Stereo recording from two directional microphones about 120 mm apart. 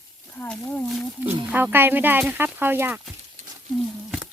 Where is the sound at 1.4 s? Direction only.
15° right (ahead or behind).